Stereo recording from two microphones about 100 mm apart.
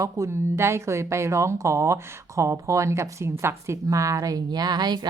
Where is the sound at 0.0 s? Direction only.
30° right (ahead or behind).